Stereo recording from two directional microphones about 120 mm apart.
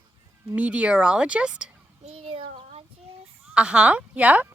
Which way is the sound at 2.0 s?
55° right (ahead or behind).